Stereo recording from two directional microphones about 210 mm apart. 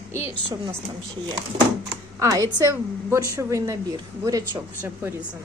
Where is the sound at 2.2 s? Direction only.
15° right (ahead or behind).